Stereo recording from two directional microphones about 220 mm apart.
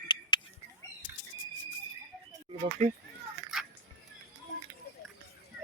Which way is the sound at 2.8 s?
35° right (ahead or behind).